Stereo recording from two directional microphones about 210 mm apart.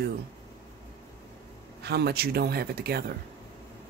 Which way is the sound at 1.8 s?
50° right (ahead or behind).